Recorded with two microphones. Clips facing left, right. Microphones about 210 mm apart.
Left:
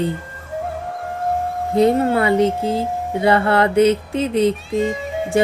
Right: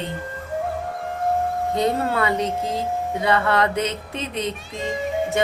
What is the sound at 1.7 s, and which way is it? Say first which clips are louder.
Speech: left 8 dB; 25° left (ahead or behind).